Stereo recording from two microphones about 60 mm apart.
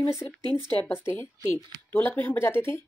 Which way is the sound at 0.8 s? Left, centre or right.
Left.